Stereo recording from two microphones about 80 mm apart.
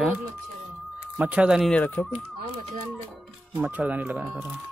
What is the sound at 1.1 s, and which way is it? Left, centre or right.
Speech, centre.